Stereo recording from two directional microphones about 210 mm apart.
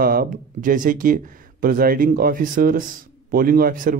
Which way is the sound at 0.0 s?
45° right (ahead or behind).